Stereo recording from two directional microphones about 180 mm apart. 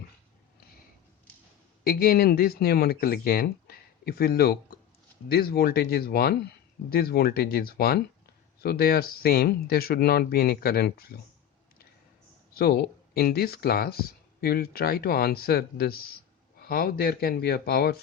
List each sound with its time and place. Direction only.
1.8 s speech: 55° left (ahead or behind)
12.5 s speech: 60° left (ahead or behind)